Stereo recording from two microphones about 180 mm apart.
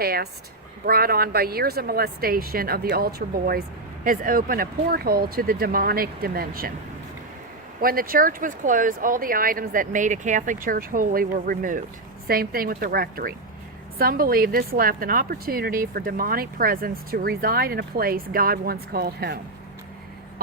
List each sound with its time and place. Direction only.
0.0 s a woman's voice: 55° right (ahead or behind)
7.8 s a woman's voice: 55° right (ahead or behind)